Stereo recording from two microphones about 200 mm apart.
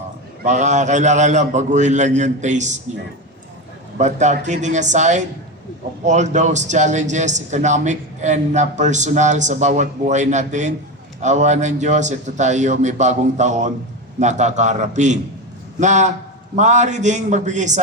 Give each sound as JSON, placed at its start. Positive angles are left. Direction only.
{"t": 0.4, "sound": "a man's voice", "side_deg": -35}
{"t": 3.9, "sound": "a man's voice", "side_deg": -35}